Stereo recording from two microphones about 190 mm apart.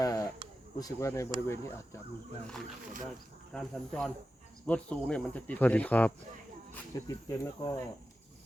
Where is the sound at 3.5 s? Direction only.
5° left (ahead or behind).